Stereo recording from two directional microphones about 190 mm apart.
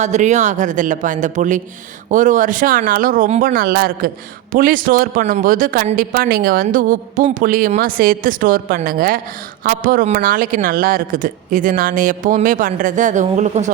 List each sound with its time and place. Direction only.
0.0 s a woman's voice: 40° right (ahead or behind)